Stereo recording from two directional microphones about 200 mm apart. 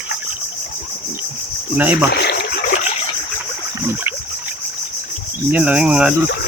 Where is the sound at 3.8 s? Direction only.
10° right (ahead or behind).